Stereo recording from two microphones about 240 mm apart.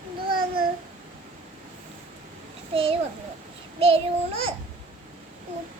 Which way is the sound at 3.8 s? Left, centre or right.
Right.